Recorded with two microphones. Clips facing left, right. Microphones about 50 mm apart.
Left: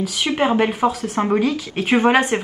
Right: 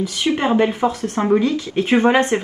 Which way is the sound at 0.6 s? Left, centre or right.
Left.